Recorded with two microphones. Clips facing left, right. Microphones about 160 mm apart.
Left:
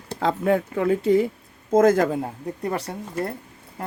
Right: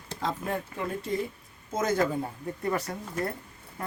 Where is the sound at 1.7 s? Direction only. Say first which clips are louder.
Left 10 dB; 55° left (ahead or behind).